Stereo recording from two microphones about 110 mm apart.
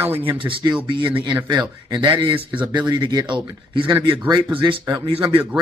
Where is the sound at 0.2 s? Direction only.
50° right (ahead or behind).